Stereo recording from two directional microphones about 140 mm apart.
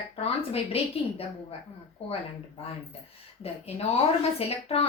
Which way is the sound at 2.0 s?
45° left (ahead or behind).